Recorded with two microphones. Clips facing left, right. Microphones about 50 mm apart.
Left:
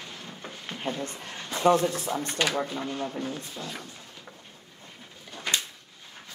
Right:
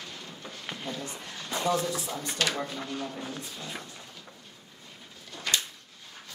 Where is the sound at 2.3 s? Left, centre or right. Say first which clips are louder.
Left 1 dB; left.